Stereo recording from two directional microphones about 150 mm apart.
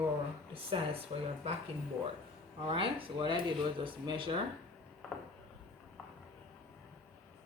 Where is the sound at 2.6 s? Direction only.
35° right (ahead or behind).